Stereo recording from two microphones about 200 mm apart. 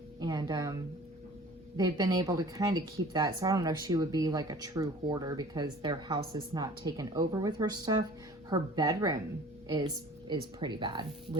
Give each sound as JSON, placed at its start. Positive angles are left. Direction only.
{"t": 0.2, "sound": "a sound", "side_deg": -20}
{"t": 1.7, "sound": "speech", "side_deg": -20}
{"t": 10.2, "sound": "speech", "side_deg": -20}